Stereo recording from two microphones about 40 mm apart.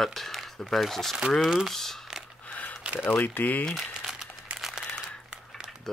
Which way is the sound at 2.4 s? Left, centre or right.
Left.